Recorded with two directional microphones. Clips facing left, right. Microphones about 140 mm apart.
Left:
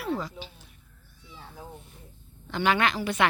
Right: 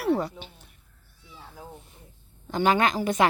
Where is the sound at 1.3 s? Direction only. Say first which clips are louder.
Even; 10° right (ahead or behind).